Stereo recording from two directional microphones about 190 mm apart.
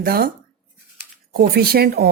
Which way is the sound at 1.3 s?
55° right (ahead or behind).